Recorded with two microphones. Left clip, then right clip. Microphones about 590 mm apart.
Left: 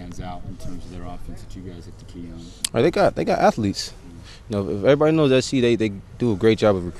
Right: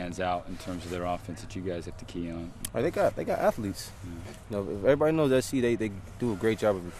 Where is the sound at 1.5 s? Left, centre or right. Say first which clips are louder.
Right 7 dB; right.